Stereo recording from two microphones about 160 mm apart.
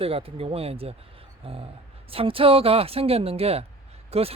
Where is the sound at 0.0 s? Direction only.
35° right (ahead or behind).